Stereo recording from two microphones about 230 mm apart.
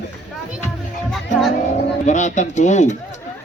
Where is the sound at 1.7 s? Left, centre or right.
Left.